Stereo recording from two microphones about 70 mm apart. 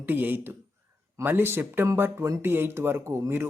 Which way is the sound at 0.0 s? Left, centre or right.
Right.